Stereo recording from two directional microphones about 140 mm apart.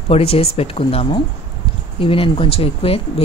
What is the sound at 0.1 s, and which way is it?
Speech, 45° left (ahead or behind).